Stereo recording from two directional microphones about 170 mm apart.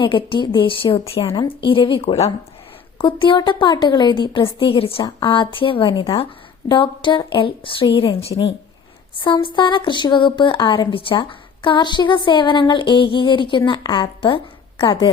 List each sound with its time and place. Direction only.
0.0 s a woman's voice: 30° left (ahead or behind)